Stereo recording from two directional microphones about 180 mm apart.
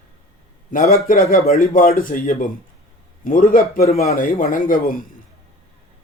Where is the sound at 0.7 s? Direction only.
45° left (ahead or behind).